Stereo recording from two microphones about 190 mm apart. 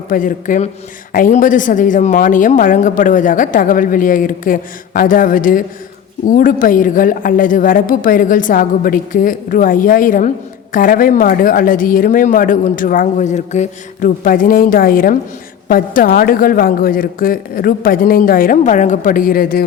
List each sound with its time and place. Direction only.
0.1 s a woman's voice: 45° left (ahead or behind)